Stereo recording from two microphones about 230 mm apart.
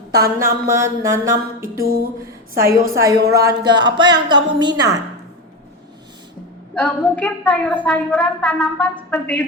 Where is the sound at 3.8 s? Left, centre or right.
Centre.